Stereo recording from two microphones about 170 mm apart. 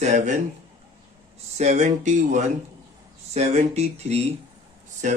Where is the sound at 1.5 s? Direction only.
40° right (ahead or behind).